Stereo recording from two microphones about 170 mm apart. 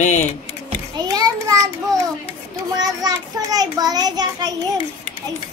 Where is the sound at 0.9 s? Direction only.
20° right (ahead or behind).